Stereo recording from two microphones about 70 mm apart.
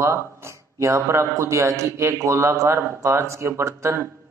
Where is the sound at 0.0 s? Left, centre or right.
Right.